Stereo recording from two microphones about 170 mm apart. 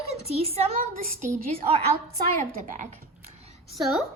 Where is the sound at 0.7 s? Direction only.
50° right (ahead or behind).